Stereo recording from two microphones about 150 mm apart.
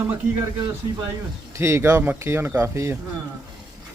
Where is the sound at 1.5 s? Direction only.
20° right (ahead or behind).